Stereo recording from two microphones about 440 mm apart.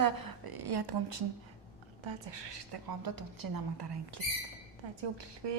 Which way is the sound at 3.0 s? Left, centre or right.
Right.